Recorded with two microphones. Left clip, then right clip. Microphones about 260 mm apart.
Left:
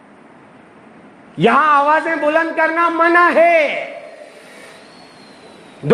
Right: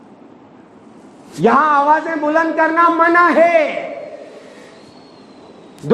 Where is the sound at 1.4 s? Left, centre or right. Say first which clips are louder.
Even; left.